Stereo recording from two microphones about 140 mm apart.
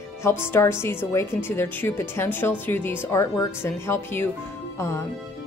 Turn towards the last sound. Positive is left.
turn(degrees=20)  # may be behind; listen again after turning